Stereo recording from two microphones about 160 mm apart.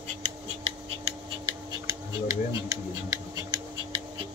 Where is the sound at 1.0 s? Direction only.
30° right (ahead or behind).